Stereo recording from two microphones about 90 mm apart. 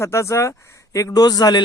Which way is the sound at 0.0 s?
35° left (ahead or behind).